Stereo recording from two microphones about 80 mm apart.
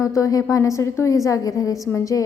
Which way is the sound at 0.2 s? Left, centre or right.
Left.